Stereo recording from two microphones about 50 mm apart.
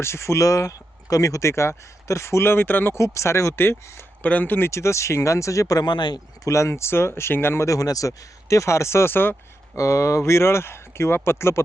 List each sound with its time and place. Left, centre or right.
0.0 s speech: left
2.5 s speech: left
2.9 s speech: left
3.5 s speech: left
4.2 s speech: left
4.7 s speech: left
6.5 s speech: left
9.7 s speech: left